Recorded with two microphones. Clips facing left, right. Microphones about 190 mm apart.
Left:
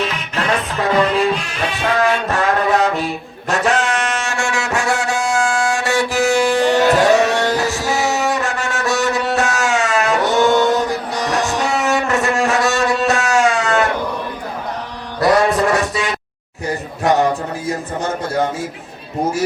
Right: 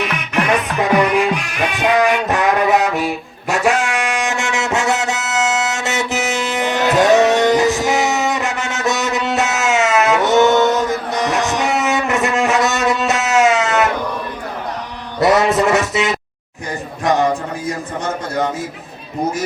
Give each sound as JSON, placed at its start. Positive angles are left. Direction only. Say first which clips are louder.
{"t": 0.3, "sound": "music", "louder": "right 3 dB", "side_deg": -15}
{"t": 15.2, "sound": "music", "louder": "right 1 dB", "side_deg": -20}